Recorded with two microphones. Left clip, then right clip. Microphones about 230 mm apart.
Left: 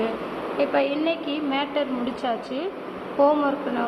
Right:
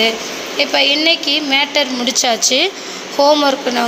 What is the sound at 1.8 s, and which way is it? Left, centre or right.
A woman's voice, right.